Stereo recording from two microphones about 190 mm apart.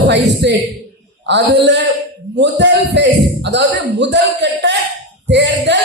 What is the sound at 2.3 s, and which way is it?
Speech, 65° right (ahead or behind).